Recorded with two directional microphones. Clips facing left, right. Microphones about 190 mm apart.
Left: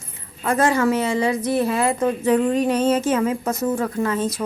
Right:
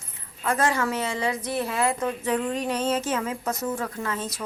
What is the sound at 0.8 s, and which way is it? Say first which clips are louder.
Speech: left 7 dB; 10° left (ahead or behind).